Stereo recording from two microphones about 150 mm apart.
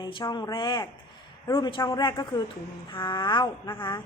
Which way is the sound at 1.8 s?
20° left (ahead or behind).